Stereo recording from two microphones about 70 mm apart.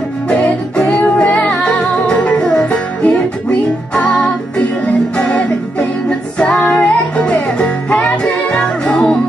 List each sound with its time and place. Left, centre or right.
0.3 s music: centre